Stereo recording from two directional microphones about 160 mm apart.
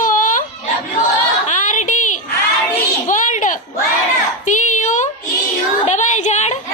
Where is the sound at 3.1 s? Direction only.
50° left (ahead or behind).